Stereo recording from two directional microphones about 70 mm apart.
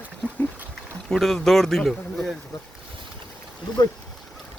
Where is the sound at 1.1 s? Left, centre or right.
Centre.